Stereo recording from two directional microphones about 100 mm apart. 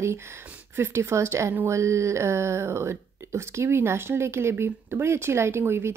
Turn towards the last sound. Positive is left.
turn(degrees=-25)  # may be behind; listen again after turning